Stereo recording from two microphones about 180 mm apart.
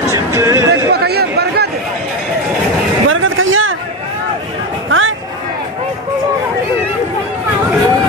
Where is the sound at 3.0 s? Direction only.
90° right.